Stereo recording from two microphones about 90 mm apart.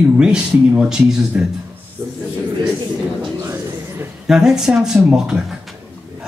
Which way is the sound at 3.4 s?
30° right (ahead or behind).